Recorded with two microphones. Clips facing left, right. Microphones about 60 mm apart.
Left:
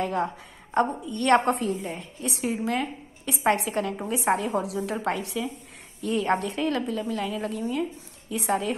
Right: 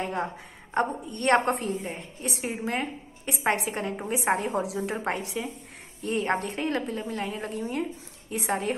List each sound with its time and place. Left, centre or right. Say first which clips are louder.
0.0 s a woman's voice: left 3 dB; right
0.7 s a woman's voice: left 3 dB; right